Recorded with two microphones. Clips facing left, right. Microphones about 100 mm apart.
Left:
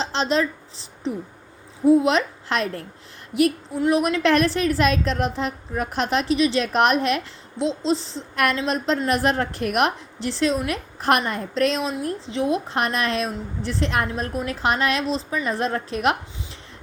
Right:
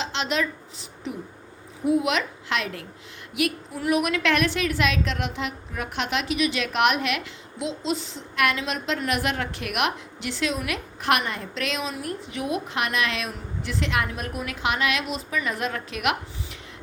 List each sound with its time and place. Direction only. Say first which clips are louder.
0.0 s a sound: left 4 dB; 35° left (ahead or behind)
1.8 s a woman's voice: left 6 dB; 30° left (ahead or behind)
11.9 s a woman's voice: left 6 dB; 25° left (ahead or behind)